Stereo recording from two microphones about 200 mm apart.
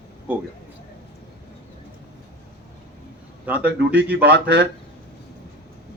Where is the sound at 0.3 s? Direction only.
10° right (ahead or behind).